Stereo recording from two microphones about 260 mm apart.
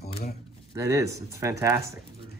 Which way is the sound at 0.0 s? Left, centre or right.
Left.